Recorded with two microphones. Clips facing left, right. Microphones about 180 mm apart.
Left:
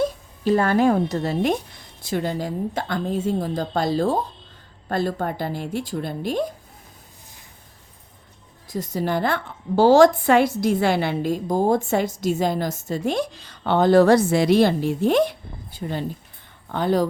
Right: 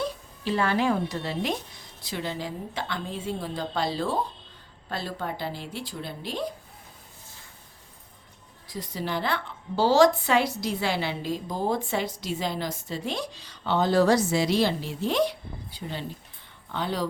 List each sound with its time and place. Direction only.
0.0 s a woman's voice: 45° left (ahead or behind)
8.6 s a woman's voice: 45° left (ahead or behind)